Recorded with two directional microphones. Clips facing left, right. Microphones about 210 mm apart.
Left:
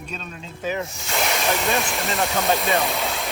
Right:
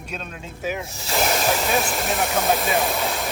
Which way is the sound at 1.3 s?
Centre (ahead or behind).